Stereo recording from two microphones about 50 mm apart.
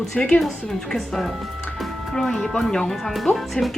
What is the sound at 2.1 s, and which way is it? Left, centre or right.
Speech, centre.